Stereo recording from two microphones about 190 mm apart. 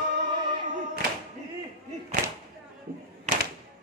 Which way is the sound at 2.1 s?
55° right (ahead or behind).